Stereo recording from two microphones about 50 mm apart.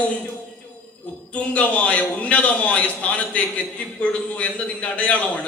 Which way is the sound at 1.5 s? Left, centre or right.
Left.